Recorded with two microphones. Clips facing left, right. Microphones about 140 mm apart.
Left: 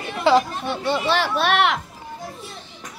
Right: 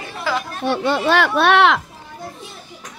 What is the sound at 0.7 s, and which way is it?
Speech, 85° right.